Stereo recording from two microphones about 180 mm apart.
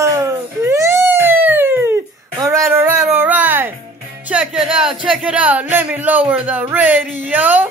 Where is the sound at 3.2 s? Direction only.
10° right (ahead or behind).